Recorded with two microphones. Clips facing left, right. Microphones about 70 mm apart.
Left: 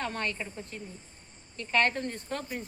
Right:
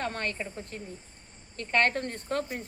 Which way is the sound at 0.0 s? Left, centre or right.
Right.